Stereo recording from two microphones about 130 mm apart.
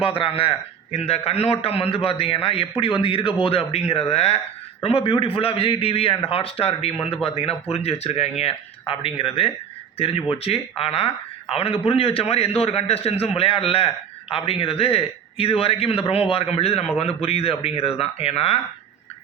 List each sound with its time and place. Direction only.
0.0 s a man's voice: 45° left (ahead or behind)